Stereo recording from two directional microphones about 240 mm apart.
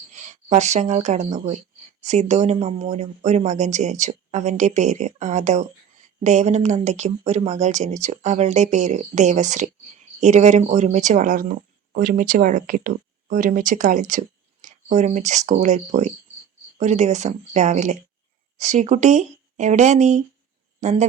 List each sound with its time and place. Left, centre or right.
0.1 s speech: right